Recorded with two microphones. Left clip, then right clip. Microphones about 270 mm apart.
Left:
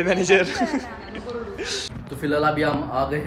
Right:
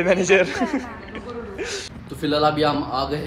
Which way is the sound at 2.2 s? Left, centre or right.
Centre.